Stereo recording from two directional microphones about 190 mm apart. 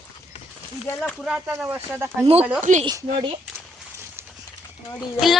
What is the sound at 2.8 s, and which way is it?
Speech, 25° right (ahead or behind).